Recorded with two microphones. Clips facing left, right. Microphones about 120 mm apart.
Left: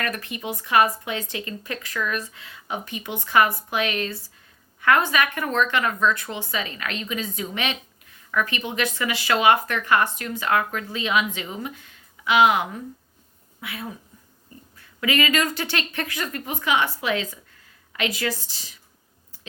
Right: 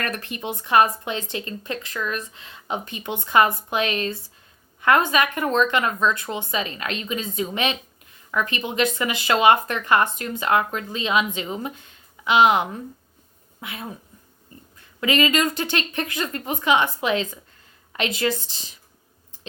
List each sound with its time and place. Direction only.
0.4 s speech: 30° right (ahead or behind)
15.0 s speech: 25° right (ahead or behind)